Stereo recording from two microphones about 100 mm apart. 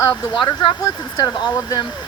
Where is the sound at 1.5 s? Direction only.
30° left (ahead or behind).